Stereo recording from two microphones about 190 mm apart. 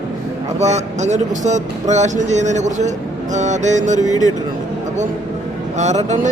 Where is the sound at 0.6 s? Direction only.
35° right (ahead or behind).